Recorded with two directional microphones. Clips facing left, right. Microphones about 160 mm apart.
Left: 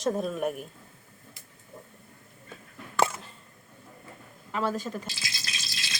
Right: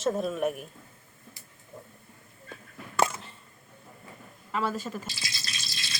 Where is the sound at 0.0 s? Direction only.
Centre (ahead or behind).